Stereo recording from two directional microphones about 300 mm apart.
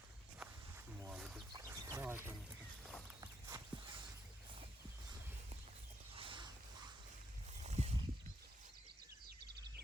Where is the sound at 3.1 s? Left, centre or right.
Centre.